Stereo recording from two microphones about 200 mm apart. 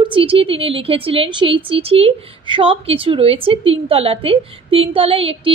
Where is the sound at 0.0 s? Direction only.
25° right (ahead or behind).